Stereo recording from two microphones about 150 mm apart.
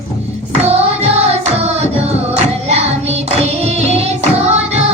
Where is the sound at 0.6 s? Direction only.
45° right (ahead or behind).